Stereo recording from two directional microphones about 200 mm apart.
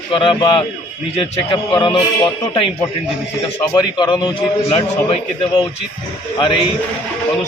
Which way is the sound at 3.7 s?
20° left (ahead or behind).